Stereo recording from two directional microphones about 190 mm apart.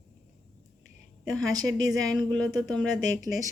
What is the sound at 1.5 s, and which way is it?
Speech, 20° right (ahead or behind).